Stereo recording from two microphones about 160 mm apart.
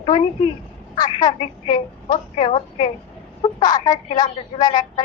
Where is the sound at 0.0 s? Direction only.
30° left (ahead or behind).